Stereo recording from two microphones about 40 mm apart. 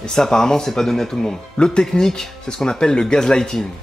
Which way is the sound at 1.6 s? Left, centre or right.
Left.